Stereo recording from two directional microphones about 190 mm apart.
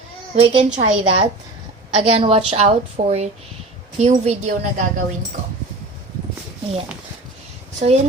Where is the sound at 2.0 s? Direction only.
30° right (ahead or behind).